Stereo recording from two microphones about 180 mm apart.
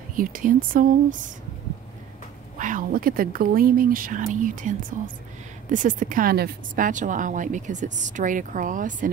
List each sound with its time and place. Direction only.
0.1 s a woman's voice: 50° right (ahead or behind)
2.6 s a woman's voice: 50° right (ahead or behind)